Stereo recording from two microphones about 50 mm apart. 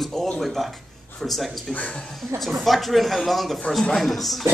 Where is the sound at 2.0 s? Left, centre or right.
Centre.